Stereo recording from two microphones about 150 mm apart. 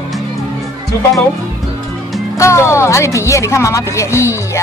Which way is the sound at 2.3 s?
20° left (ahead or behind).